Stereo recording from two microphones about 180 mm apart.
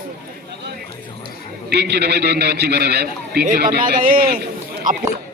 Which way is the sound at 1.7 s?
65° right (ahead or behind).